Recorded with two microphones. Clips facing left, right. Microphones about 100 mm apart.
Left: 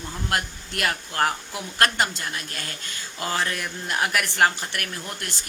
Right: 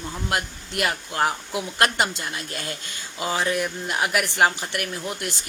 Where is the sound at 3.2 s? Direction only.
10° right (ahead or behind).